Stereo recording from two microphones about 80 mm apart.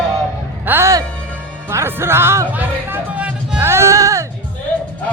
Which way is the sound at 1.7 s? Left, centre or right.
Right.